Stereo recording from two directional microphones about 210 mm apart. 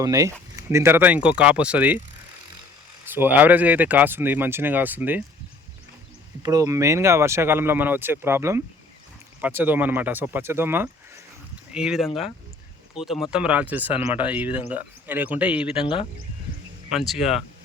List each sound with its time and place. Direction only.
0.0 s speech: 15° right (ahead or behind)
3.1 s speech: 10° right (ahead or behind)
6.4 s speech: 15° right (ahead or behind)
15.7 s speech: 25° left (ahead or behind)
16.9 s speech: centre (ahead or behind)